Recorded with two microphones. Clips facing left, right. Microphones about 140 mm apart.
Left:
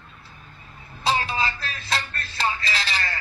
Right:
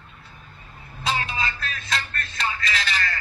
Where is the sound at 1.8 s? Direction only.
30° left (ahead or behind).